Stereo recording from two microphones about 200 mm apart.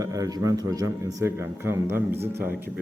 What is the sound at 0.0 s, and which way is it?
A man's voice, 15° right (ahead or behind).